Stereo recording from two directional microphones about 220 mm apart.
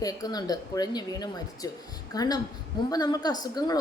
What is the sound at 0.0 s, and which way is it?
A woman's voice, 15° left (ahead or behind).